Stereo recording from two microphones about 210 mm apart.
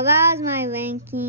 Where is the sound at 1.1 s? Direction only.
45° right (ahead or behind).